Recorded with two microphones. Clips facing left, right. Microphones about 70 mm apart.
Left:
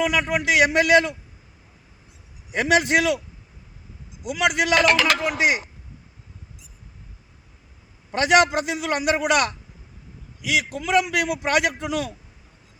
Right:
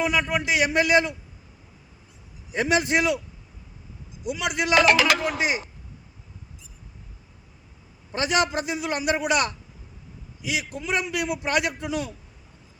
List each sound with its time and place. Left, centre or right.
0.0 s a man's voice: left
2.5 s a man's voice: left
4.2 s a man's voice: left
4.9 s speech: centre
5.2 s a man's voice: left
8.1 s a man's voice: left